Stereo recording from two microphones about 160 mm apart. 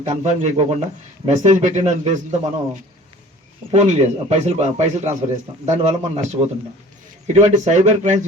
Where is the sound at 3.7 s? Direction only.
45° right (ahead or behind).